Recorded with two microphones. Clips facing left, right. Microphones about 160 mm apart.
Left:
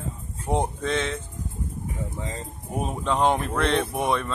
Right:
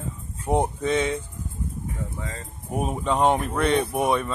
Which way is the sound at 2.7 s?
10° right (ahead or behind).